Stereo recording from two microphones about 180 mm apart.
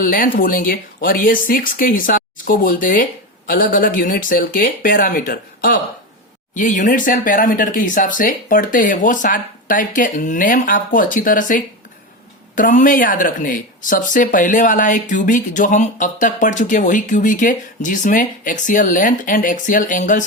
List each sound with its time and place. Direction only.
0.0 s speech: 50° left (ahead or behind)